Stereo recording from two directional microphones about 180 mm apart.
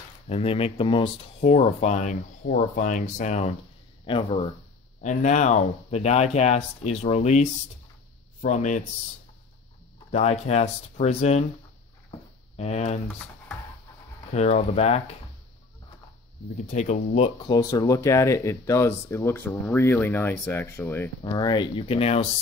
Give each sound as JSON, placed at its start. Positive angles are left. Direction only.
{"t": 0.3, "sound": "speech", "side_deg": 35}
{"t": 4.0, "sound": "speech", "side_deg": 25}
{"t": 5.0, "sound": "speech", "side_deg": 40}
{"t": 10.1, "sound": "speech", "side_deg": 40}
{"t": 12.5, "sound": "speech", "side_deg": 40}
{"t": 14.3, "sound": "speech", "side_deg": 40}
{"t": 16.7, "sound": "speech", "side_deg": 40}
{"t": 17.5, "sound": "speech", "side_deg": 20}